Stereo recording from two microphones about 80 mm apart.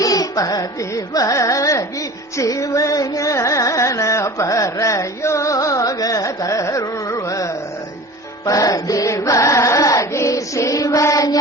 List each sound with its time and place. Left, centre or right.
0.0 s carnatic music: left
8.4 s chant: left
9.4 s music: left